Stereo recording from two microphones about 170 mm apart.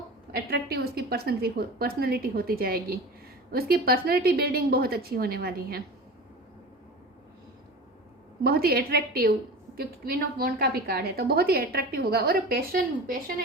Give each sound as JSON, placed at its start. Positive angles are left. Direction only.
{"t": 0.3, "sound": "a woman's voice", "side_deg": -65}
{"t": 8.4, "sound": "a woman's voice", "side_deg": -65}